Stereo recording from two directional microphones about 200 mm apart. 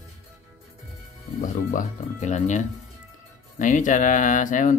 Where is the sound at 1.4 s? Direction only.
40° left (ahead or behind).